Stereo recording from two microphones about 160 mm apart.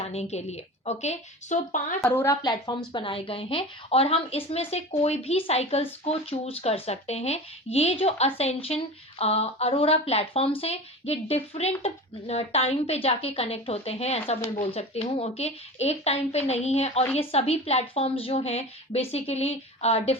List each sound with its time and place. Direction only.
0.0 s a woman's voice: 45° left (ahead or behind)
2.0 s a woman's voice: 15° left (ahead or behind); by 20.1 s 40° left (ahead or behind)